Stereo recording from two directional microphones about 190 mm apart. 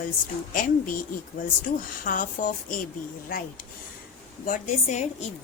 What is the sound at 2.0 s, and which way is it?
Speech, 45° left (ahead or behind).